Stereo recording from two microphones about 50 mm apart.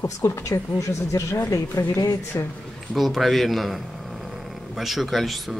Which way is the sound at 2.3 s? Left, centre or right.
Left.